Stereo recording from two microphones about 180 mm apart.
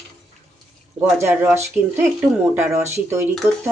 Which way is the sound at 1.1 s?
15° right (ahead or behind).